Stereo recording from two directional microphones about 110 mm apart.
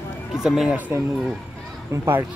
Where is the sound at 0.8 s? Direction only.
15° right (ahead or behind).